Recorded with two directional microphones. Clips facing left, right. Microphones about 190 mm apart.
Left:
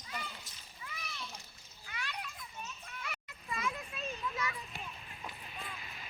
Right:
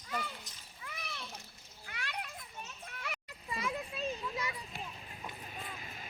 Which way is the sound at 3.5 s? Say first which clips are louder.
Right 2 dB; 30° right (ahead or behind).